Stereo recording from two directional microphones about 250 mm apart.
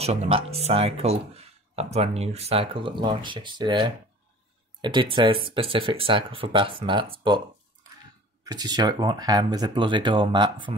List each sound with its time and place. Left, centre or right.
0.0 s speech: right
8.5 s speech: centre